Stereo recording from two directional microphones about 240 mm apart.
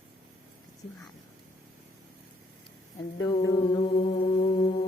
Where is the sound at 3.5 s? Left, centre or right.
Centre.